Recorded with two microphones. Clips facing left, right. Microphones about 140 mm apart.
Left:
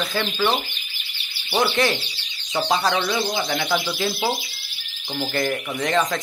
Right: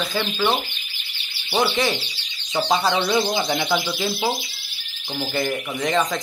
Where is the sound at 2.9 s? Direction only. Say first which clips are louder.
Right 2 dB; 20° right (ahead or behind).